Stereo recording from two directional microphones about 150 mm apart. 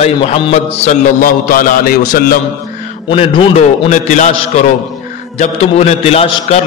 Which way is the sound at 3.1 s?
35° left (ahead or behind).